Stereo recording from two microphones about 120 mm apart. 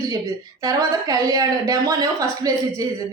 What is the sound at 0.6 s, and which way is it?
Speech, 30° right (ahead or behind).